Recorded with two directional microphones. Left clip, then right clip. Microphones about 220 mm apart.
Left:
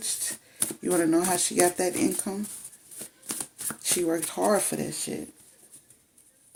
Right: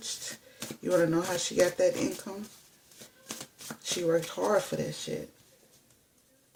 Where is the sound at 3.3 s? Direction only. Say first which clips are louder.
Left 4 dB; 35° left (ahead or behind).